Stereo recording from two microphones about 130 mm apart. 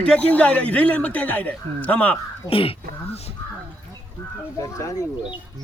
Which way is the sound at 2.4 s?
45° left (ahead or behind).